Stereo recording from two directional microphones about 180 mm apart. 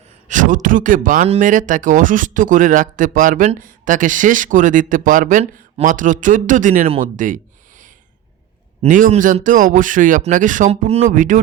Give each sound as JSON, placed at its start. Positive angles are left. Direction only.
{"t": 0.3, "sound": "speech", "side_deg": -45}
{"t": 7.0, "sound": "a sound", "side_deg": -45}
{"t": 8.8, "sound": "speech", "side_deg": -45}